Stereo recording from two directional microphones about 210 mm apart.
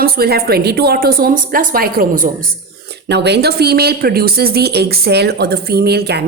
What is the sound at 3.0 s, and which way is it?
A woman's voice, 55° right (ahead or behind).